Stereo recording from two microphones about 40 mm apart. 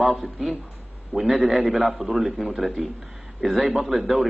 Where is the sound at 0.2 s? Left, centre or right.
Centre.